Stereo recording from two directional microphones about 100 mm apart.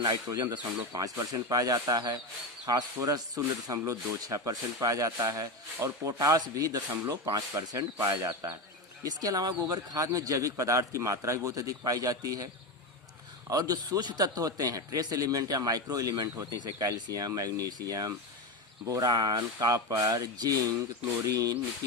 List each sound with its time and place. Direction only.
0.0 s a man's voice: 40° right (ahead or behind)
7.3 s a man's voice: 25° right (ahead or behind)
13.5 s a man's voice: 40° right (ahead or behind)